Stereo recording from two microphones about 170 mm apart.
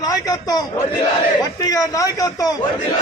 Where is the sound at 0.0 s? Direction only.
20° left (ahead or behind).